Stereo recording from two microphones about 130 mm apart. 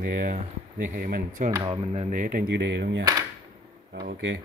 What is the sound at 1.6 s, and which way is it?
Speech, 45° right (ahead or behind).